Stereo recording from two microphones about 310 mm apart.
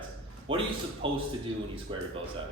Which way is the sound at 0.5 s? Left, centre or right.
Centre.